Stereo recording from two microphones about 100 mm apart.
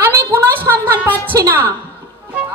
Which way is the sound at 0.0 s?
25° right (ahead or behind).